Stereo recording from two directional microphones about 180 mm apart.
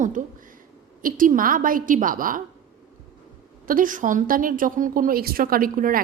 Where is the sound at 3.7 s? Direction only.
50° right (ahead or behind).